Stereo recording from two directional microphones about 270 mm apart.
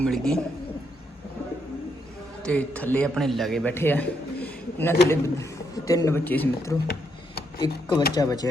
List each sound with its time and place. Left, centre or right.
0.0 s speech: centre
2.4 s a man's voice: centre